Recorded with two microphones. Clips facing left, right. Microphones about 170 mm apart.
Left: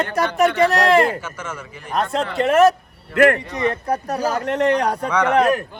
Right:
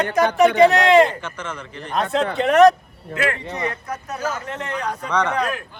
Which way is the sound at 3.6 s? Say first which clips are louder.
Left 9 dB; 35° left (ahead or behind).